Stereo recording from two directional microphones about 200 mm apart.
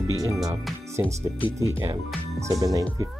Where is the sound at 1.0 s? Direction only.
5° left (ahead or behind).